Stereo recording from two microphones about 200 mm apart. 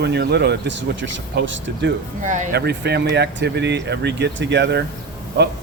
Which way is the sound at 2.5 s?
55° right (ahead or behind).